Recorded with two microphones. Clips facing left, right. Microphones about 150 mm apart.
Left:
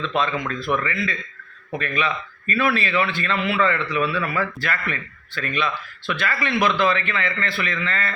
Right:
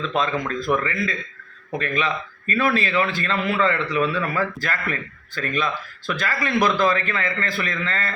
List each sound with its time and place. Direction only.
0.2 s a man's voice: 40° right (ahead or behind)